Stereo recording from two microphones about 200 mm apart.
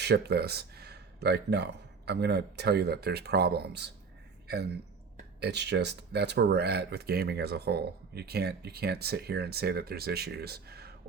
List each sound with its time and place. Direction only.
0.0 s speech: 55° right (ahead or behind)